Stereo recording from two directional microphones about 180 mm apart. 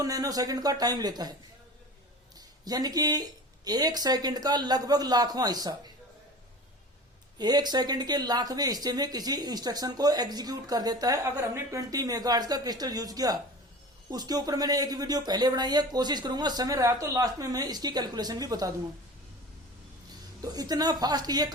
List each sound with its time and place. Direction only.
0.0 s speech: 20° right (ahead or behind)
2.6 s speech: 20° right (ahead or behind)
7.3 s speech: 25° right (ahead or behind)
20.4 s speech: 20° right (ahead or behind)